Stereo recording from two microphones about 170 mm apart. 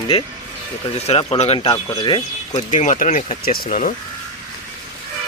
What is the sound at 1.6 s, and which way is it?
Speech, 25° left (ahead or behind).